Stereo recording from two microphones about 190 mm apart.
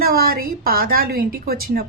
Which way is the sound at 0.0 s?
50° right (ahead or behind).